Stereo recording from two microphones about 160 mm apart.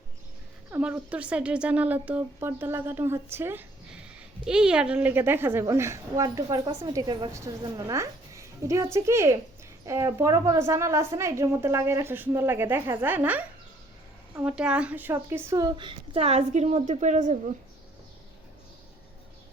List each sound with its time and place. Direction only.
0.7 s a woman's voice: 10° right (ahead or behind); by 17.3 s 50° right (ahead or behind)